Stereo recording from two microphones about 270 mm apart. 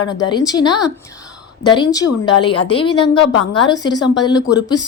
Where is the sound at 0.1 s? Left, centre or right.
Centre.